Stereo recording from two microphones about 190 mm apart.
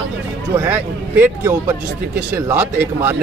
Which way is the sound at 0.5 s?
10° right (ahead or behind).